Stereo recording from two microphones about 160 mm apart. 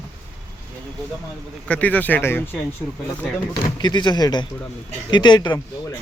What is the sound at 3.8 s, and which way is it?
Speech, 25° left (ahead or behind).